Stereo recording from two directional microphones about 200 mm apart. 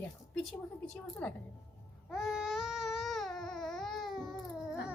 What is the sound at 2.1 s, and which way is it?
Baby cry, centre (ahead or behind).